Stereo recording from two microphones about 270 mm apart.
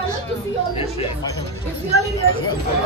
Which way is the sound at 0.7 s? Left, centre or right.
Left.